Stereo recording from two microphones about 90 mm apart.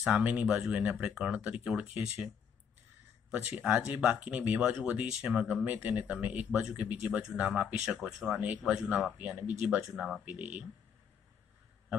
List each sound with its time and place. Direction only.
0.0 s speech: 15° right (ahead or behind)
9.8 s speech: 5° right (ahead or behind)
10.2 s speech: 20° right (ahead or behind)